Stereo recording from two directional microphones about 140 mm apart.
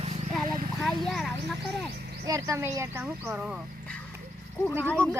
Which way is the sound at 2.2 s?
25° right (ahead or behind).